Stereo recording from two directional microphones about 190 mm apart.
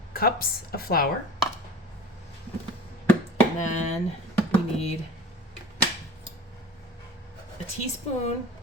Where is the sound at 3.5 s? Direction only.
40° left (ahead or behind).